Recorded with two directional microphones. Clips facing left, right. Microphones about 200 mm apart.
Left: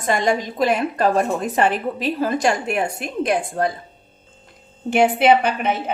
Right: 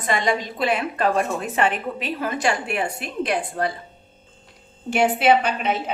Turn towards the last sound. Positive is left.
turn(degrees=55)  # may be behind; listen again after turning